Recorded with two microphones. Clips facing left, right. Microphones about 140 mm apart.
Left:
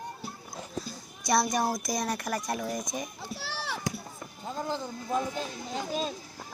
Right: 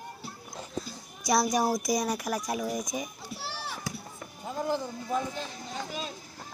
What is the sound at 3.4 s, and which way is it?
Children playing, 75° left (ahead or behind).